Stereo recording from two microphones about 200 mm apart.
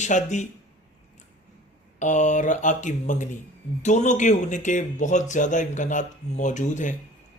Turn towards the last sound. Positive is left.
turn(degrees=40)  # may be behind; listen again after turning